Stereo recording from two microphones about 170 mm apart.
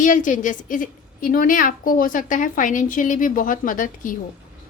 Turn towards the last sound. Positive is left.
turn(degrees=50)  # may be behind; listen again after turning